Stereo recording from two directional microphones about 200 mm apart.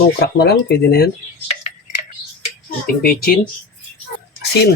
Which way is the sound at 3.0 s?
50° left (ahead or behind).